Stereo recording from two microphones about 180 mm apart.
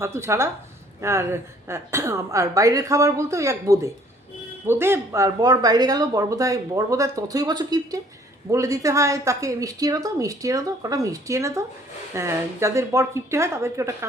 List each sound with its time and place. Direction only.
0.0 s a woman's voice: 15° right (ahead or behind)